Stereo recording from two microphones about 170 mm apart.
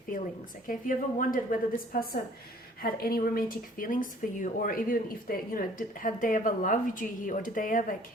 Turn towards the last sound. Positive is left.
turn(degrees=50)  # may be behind; listen again after turning